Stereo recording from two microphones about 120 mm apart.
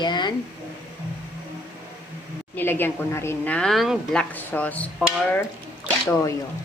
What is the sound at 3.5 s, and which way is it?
Speech, centre (ahead or behind).